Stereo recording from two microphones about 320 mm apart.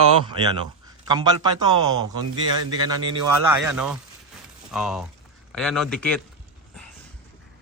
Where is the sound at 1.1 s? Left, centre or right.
Centre.